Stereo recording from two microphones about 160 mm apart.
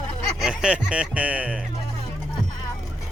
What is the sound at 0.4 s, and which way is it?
Speech, 5° right (ahead or behind).